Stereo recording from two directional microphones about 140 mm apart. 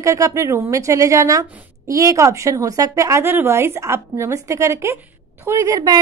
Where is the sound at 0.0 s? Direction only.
20° right (ahead or behind).